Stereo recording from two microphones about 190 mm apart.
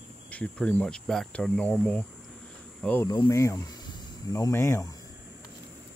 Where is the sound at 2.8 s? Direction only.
10° left (ahead or behind).